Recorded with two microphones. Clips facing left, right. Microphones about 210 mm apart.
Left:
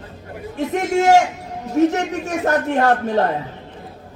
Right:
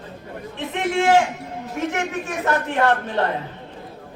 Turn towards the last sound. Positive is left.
turn(degrees=40)  # may be behind; listen again after turning